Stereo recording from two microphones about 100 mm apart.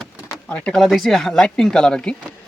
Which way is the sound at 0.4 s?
10° left (ahead or behind).